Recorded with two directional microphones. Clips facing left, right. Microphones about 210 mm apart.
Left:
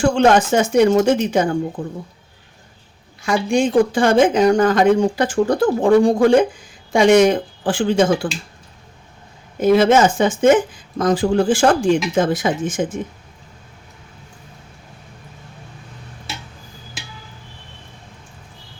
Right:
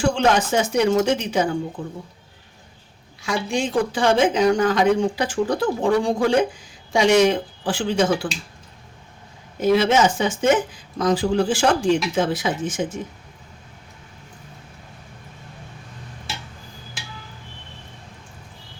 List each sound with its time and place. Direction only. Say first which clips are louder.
0.0 s speech: left 5 dB; 50° left (ahead or behind)
3.2 s speech: left 6 dB; 50° left (ahead or behind)
9.6 s speech: left 4 dB; 50° left (ahead or behind)